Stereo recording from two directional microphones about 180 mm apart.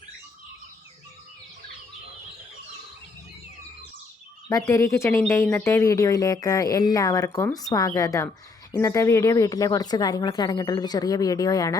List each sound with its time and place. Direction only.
4.4 s speech: 15° left (ahead or behind)